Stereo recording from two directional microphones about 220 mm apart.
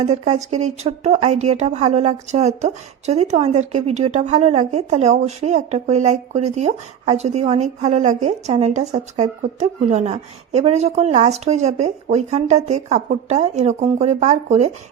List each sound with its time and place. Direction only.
0.0 s speech: 30° right (ahead or behind)